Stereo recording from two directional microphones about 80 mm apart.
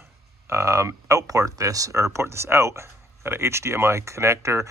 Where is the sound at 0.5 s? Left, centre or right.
Right.